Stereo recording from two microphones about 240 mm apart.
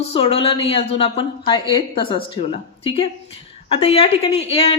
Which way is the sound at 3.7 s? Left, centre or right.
Left.